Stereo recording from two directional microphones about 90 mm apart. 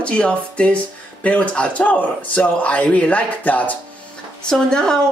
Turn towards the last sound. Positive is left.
turn(degrees=5)  # may be behind; listen again after turning